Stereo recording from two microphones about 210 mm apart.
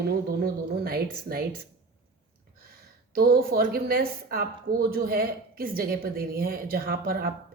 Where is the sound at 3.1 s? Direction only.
45° right (ahead or behind).